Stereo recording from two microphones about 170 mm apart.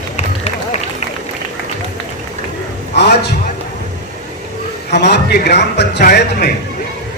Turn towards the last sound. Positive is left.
turn(degrees=65)  # may be behind; listen again after turning